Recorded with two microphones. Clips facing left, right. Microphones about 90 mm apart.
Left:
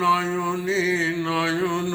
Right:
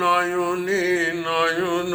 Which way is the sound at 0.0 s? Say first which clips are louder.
Right 1 dB; 60° right (ahead or behind).